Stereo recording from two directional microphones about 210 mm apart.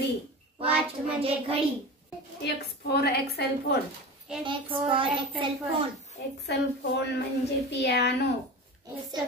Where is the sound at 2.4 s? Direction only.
50° left (ahead or behind).